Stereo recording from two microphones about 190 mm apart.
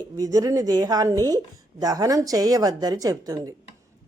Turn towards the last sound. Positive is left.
turn(degrees=-20)  # may be behind; listen again after turning